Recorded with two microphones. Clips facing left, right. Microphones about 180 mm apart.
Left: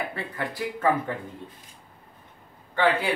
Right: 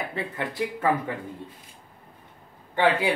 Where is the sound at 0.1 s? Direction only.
20° right (ahead or behind).